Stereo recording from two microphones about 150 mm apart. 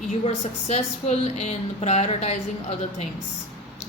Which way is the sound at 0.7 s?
50° left (ahead or behind).